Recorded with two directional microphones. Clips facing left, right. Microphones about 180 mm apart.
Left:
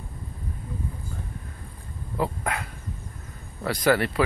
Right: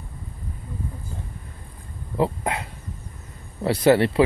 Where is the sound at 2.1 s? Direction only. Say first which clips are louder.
Right 4 dB; 25° right (ahead or behind).